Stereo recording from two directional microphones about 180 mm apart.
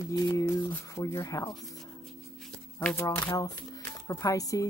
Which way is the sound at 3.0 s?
15° left (ahead or behind).